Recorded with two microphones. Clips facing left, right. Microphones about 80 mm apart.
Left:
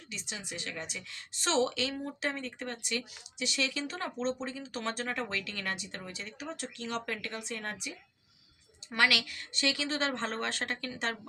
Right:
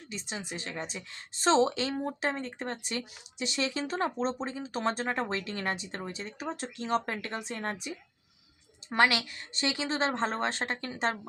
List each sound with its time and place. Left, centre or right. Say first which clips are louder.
0.1 s speech: right 4 dB; right